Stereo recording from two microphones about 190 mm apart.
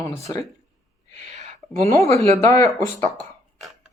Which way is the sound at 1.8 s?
15° left (ahead or behind).